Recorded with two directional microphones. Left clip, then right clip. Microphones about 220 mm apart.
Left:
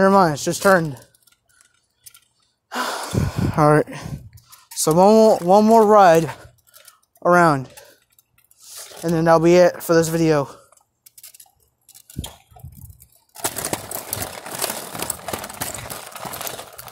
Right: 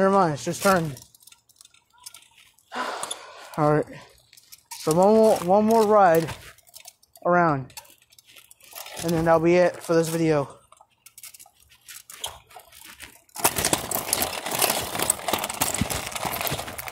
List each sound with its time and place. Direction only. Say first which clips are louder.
0.0 s speech: left 5 dB; 50° left (ahead or behind)
2.7 s gasp: left 5 dB; 50° left (ahead or behind)
4.7 s speech: left 5 dB; 55° left (ahead or behind)
9.0 s speech: left 5 dB; 50° left (ahead or behind)
13.3 s a sound: right 3 dB; 30° right (ahead or behind)
13.9 s crumpling: right 3 dB; 40° right (ahead or behind)
15.0 s a sound: right 3 dB; 40° right (ahead or behind)